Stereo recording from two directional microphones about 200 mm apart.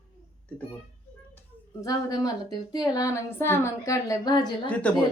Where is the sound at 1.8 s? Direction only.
15° left (ahead or behind).